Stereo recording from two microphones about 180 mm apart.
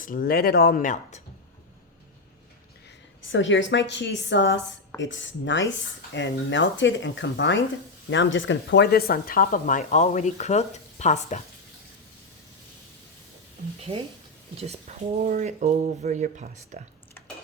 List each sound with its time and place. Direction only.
0.0 s speech: 50° left (ahead or behind)
3.2 s a woman's voice: 90° left; by 11.4 s 40° left (ahead or behind)
14.5 s speech: 35° right (ahead or behind)